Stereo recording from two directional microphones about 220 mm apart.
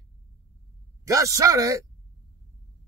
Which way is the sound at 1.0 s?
15° right (ahead or behind).